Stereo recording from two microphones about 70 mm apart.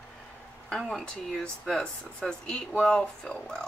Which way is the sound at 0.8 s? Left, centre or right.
Centre.